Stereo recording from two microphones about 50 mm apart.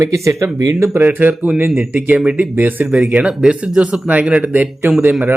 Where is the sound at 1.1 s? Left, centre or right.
Right.